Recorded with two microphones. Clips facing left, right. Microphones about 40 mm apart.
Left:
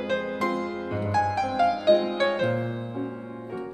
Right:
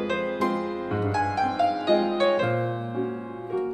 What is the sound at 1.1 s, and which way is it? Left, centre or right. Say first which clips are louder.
Music: left 3 dB; centre.